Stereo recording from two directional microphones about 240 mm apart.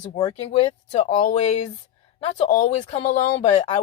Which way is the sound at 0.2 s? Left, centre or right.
Left.